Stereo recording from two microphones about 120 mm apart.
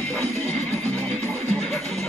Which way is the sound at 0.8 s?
10° left (ahead or behind).